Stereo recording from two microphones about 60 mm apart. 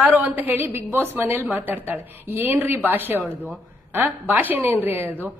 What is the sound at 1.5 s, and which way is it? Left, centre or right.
A woman's voice, right.